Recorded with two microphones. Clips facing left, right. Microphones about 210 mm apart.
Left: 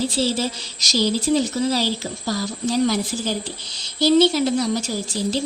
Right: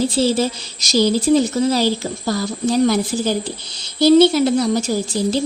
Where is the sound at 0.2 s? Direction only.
50° right (ahead or behind).